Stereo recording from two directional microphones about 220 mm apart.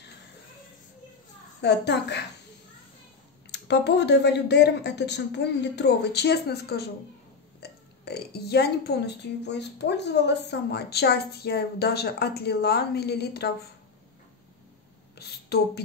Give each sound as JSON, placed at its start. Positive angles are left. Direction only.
{"t": 1.6, "sound": "speech", "side_deg": 50}
{"t": 3.5, "sound": "speech", "side_deg": 50}
{"t": 15.1, "sound": "speech", "side_deg": 45}